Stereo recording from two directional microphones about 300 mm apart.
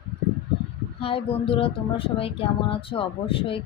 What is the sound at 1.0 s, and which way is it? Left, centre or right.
Speech, centre.